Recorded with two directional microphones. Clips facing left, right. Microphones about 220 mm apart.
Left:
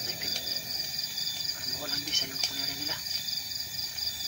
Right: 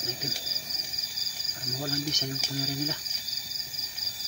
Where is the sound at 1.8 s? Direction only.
40° right (ahead or behind).